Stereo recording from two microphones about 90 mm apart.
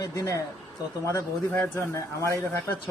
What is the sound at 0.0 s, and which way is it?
Speech, 40° left (ahead or behind).